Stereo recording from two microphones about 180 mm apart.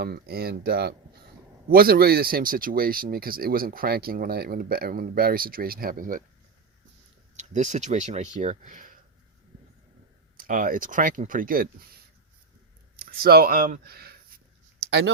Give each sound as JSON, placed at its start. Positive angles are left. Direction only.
{"t": 0.0, "sound": "speech", "side_deg": -60}
{"t": 7.3, "sound": "speech", "side_deg": -40}
{"t": 10.3, "sound": "speech", "side_deg": -50}
{"t": 13.0, "sound": "speech", "side_deg": -55}
{"t": 14.8, "sound": "clicking", "side_deg": -75}